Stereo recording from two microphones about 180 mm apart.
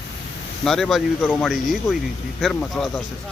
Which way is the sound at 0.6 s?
Centre (ahead or behind).